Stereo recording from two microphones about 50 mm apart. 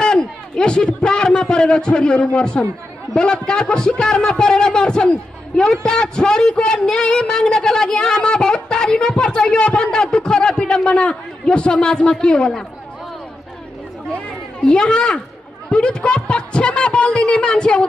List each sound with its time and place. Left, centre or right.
0.0 s a man's voice: centre
14.1 s a sound: centre
15.7 s speech: centre